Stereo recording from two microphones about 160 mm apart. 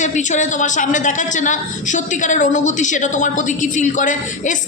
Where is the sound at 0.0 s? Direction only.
50° left (ahead or behind).